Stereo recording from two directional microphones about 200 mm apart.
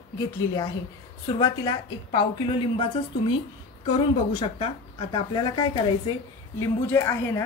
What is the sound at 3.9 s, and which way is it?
A woman's voice, 25° left (ahead or behind).